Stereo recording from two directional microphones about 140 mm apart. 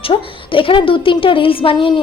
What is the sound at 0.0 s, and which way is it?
A woman's voice, 40° left (ahead or behind).